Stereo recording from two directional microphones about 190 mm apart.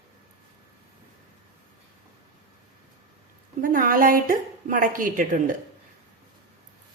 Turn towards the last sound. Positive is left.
turn(degrees=-45)  # may be behind; listen again after turning